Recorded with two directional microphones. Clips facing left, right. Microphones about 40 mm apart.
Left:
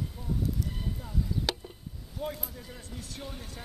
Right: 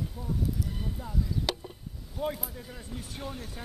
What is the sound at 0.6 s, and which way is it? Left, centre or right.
Clip-clop, centre.